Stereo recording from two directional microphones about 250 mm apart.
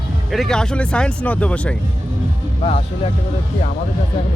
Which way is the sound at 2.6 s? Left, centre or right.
Left.